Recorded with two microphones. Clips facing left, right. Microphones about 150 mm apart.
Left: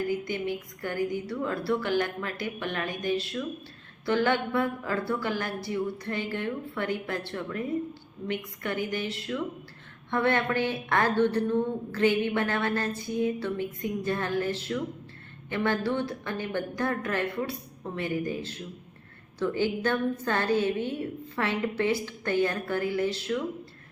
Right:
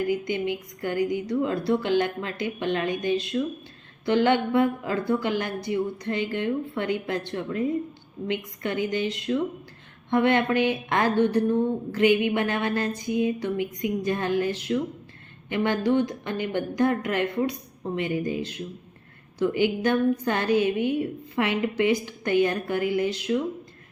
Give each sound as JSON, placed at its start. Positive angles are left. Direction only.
{"t": 0.1, "sound": "a woman's voice", "side_deg": -20}